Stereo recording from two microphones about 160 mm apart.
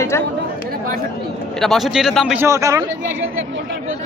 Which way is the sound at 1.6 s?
Centre (ahead or behind).